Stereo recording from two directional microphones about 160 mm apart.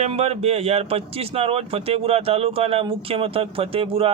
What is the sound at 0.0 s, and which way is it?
A man's voice, 40° right (ahead or behind).